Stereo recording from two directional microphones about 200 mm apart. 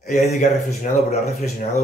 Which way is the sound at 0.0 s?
35° left (ahead or behind).